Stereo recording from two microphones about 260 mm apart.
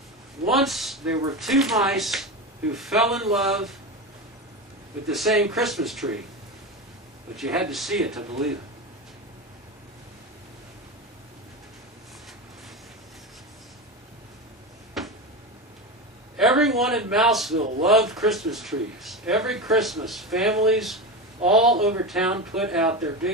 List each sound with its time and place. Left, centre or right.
0.5 s speech: centre
5.0 s speech: centre
7.3 s speech: centre
15.0 s a sound: centre
16.3 s a man's voice: centre
17.6 s speech: right
17.8 s speech: centre